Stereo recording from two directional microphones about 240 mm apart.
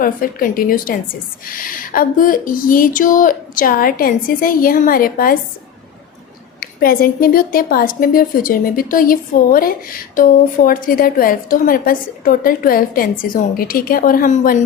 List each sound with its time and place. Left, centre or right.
0.0 s a woman's voice: left
6.6 s a woman's voice: left